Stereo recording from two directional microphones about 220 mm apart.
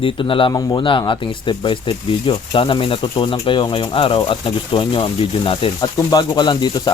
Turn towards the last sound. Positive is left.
turn(degrees=20)  # may be behind; listen again after turning